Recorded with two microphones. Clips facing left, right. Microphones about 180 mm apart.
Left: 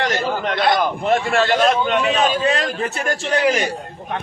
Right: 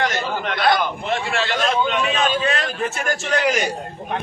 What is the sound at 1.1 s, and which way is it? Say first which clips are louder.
A man's voice: left 7 dB; 45° left (ahead or behind).